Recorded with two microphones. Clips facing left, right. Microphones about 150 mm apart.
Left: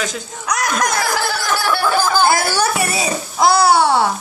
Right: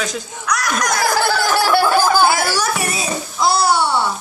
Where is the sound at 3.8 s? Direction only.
90° left.